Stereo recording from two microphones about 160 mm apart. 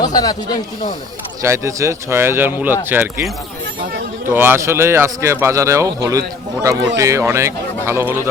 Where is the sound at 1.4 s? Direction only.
20° right (ahead or behind).